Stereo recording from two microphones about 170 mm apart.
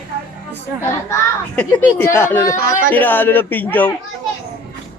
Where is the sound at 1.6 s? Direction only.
10° left (ahead or behind).